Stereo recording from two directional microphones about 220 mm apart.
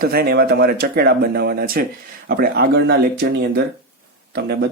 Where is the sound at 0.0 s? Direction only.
45° right (ahead or behind).